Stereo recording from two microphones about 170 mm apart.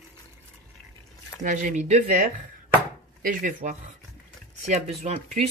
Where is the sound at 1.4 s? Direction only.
50° right (ahead or behind).